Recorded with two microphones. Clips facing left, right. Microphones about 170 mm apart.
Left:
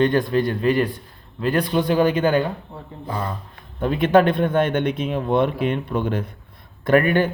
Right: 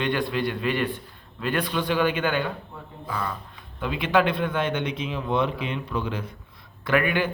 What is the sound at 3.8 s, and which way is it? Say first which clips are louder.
Speech: left 6 dB; 50° left (ahead or behind).